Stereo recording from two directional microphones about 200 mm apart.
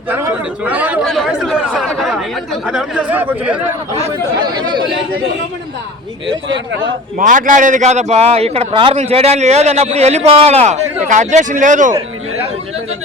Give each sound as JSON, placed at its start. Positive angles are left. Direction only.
{"t": 0.1, "sound": "chatter", "side_deg": -10}
{"t": 4.5, "sound": "speech", "side_deg": -20}
{"t": 7.2, "sound": "a man's voice", "side_deg": -40}